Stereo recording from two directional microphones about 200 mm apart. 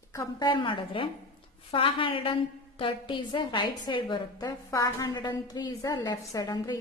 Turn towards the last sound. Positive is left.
turn(degrees=20)  # may be behind; listen again after turning